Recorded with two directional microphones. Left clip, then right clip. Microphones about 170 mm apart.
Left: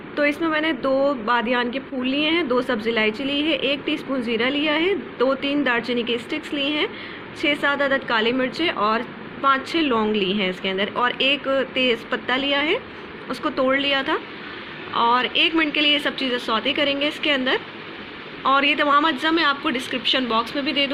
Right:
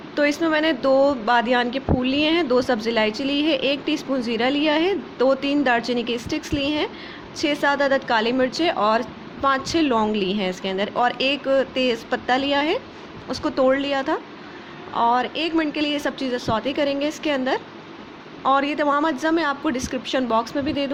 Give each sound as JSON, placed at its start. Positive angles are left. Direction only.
{"t": 0.2, "sound": "speech", "side_deg": -35}